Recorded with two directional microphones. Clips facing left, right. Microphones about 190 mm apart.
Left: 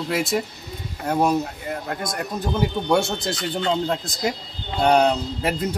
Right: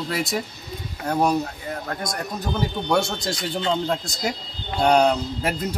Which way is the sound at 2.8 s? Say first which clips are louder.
Left 1 dB; 5° left (ahead or behind).